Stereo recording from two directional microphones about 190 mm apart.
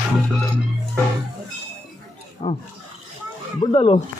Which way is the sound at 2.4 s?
20° left (ahead or behind).